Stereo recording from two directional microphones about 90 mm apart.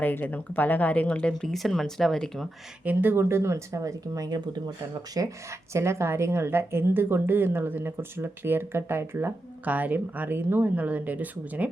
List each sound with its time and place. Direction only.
0.0 s speech: 20° left (ahead or behind)
1.3 s speech: 5° left (ahead or behind)
2.8 s speech: 20° right (ahead or behind); by 4.4 s 40° right (ahead or behind)
4.4 s speech: 50° right (ahead or behind)
5.1 s a woman's voice: 35° right (ahead or behind); by 11.7 s 20° right (ahead or behind)